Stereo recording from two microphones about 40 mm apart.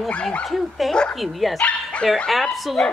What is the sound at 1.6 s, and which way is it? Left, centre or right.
Dog, left.